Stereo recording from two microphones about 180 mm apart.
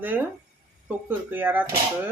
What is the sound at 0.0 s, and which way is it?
Speech, 10° right (ahead or behind).